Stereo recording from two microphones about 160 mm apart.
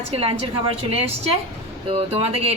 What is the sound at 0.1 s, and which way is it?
Speech, 35° right (ahead or behind).